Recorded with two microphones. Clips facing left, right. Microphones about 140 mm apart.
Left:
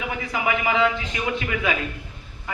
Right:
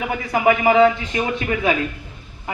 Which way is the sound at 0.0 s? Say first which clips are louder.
Right 8 dB; 45° right (ahead or behind).